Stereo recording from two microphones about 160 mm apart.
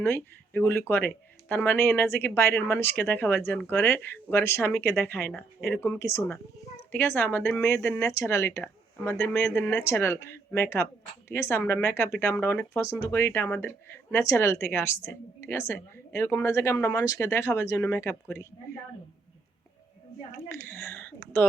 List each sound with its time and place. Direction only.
0.0 s speech: 15° left (ahead or behind)
20.3 s speech: 15° left (ahead or behind)